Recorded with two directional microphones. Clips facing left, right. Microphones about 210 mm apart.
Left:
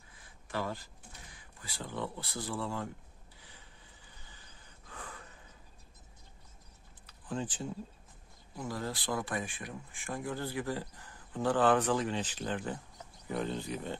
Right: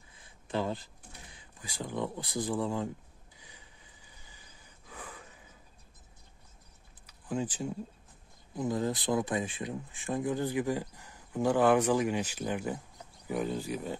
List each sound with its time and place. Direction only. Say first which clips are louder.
0.5 s speech: right 4 dB; 20° right (ahead or behind)
7.1 s typing: right 4 dB; 10° right (ahead or behind)
8.5 s speech: right 7 dB; 20° right (ahead or behind)